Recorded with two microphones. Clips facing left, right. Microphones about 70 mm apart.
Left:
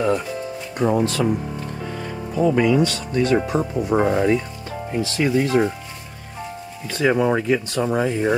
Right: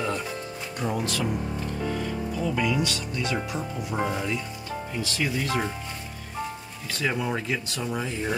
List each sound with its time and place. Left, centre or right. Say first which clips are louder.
0.7 s speech: left 9 dB; left
2.4 s speech: left 10 dB; left
5.0 s speech: left 10 dB; left
7.0 s speech: left 10 dB; left